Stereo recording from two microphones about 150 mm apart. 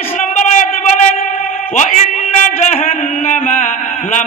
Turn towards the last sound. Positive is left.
turn(degrees=55)  # may be behind; listen again after turning